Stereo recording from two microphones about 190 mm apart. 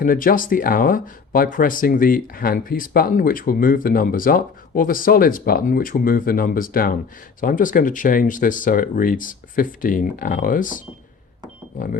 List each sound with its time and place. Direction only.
0.0 s speech: 45° left (ahead or behind)